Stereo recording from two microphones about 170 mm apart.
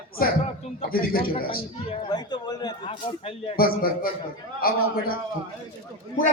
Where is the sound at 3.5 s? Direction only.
60° left (ahead or behind).